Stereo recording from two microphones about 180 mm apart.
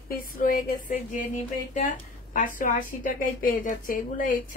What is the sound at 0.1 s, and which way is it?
A woman's voice, 50° left (ahead or behind).